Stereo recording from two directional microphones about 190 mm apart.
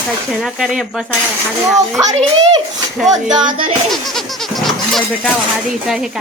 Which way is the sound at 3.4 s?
40° right (ahead or behind).